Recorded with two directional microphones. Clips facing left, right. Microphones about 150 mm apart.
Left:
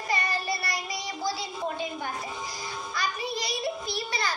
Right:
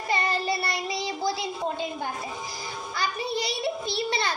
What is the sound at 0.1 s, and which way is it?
Child singing, 25° right (ahead or behind).